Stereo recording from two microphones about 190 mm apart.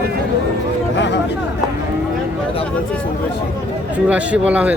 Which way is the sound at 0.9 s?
70° left (ahead or behind).